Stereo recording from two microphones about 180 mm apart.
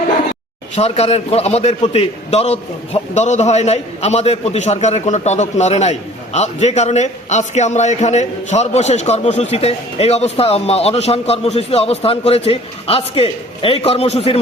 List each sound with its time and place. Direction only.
0.8 s a man's voice: 35° left (ahead or behind)